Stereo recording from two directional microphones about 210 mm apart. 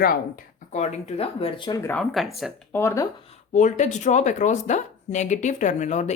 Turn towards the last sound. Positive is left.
turn(degrees=35)  # may be behind; listen again after turning